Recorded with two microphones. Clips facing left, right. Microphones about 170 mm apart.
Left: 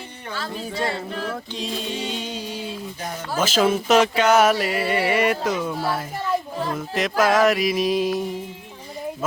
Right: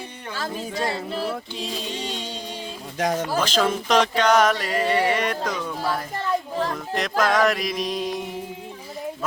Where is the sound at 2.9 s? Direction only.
90° right.